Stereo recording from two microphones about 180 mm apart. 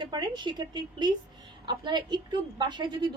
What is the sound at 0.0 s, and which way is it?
A woman's voice, 25° right (ahead or behind).